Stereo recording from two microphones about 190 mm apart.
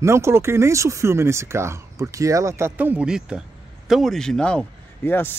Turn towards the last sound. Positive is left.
turn(degrees=10)  # may be behind; listen again after turning